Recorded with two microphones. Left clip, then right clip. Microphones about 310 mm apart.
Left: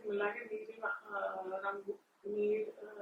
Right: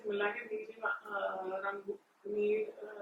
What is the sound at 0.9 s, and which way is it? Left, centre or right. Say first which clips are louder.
Speech: right 3 dB; centre.